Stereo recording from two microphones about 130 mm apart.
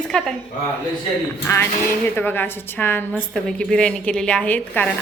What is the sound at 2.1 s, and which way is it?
Speech, 15° left (ahead or behind).